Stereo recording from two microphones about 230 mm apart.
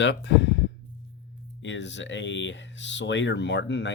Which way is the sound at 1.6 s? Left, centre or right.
Left.